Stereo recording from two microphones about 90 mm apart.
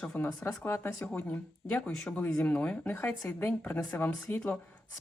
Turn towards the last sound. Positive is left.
turn(degrees=15)  # may be behind; listen again after turning